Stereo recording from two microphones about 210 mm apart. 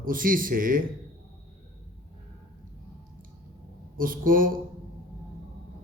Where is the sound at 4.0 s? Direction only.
40° right (ahead or behind).